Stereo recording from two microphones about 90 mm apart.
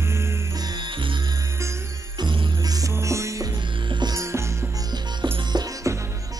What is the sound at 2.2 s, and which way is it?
Music, 55° right (ahead or behind).